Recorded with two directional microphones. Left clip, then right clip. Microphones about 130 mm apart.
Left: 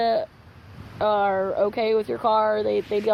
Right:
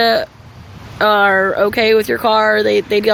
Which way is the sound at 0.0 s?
35° right (ahead or behind).